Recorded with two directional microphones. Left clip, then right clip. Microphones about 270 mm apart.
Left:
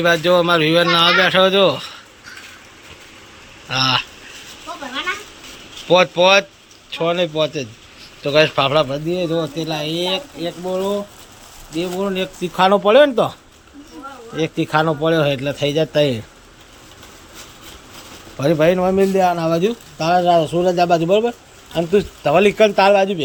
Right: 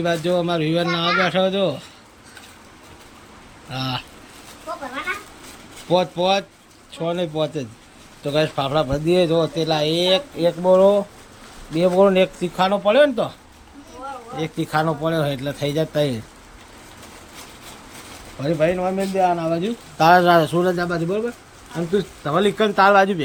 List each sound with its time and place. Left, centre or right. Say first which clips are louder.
0.0 s a man's voice: left 7 dB; centre
3.7 s a man's voice: left 10 dB; centre
5.9 s a man's voice: left 6 dB; centre
12.5 s speech: left 4 dB; centre
14.3 s speech: left 5 dB; centre
18.3 s a man's voice: left 5 dB; centre
20.0 s a man's voice: right 1 dB; centre
20.7 s a man's voice: left 9 dB; centre